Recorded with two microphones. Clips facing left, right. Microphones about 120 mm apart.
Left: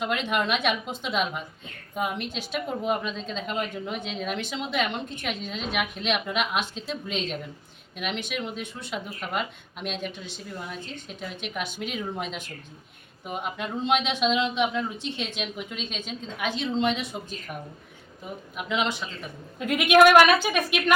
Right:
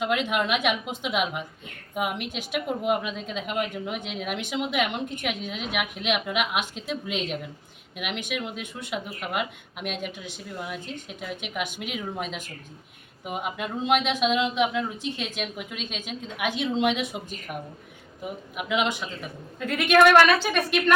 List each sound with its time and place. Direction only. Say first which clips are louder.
0.0 s a woman's voice: right 1 dB; 5° right (ahead or behind)
19.5 s speech: left 1 dB; 15° left (ahead or behind)